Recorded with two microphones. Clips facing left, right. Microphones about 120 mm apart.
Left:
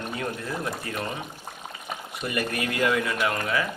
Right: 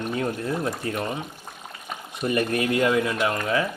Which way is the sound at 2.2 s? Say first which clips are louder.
Right 6 dB; 30° right (ahead or behind).